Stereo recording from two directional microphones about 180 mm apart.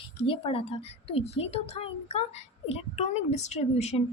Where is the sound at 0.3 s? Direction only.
30° left (ahead or behind).